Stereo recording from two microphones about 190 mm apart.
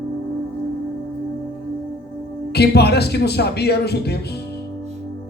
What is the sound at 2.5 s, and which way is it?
Speech, 60° left (ahead or behind).